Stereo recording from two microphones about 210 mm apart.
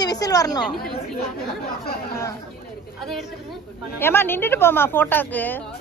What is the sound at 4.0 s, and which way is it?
A woman's voice, 10° left (ahead or behind).